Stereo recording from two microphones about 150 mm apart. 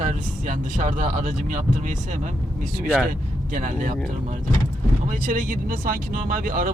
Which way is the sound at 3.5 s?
60° right (ahead or behind).